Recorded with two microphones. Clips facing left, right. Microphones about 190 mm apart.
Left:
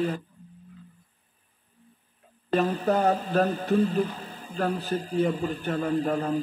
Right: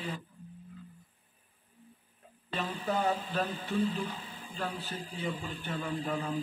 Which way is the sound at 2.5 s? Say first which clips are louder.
Left 10 dB; 45° left (ahead or behind).